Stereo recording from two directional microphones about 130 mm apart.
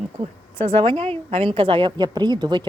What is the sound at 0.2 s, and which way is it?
A woman's voice, 45° right (ahead or behind).